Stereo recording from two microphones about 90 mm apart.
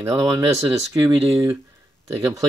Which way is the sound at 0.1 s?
55° right (ahead or behind).